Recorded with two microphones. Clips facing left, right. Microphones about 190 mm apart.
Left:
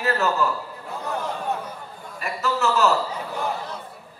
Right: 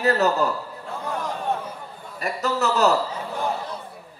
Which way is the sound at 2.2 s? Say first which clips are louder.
Right 1 dB; 40° right (ahead or behind).